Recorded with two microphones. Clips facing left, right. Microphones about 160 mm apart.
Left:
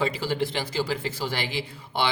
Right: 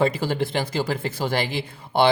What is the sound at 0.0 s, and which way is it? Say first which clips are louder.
Speech: right 4 dB; 50° right (ahead or behind).